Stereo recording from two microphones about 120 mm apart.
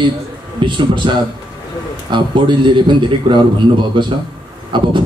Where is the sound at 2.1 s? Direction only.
40° right (ahead or behind).